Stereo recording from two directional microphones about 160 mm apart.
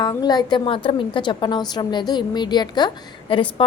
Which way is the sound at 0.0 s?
25° left (ahead or behind).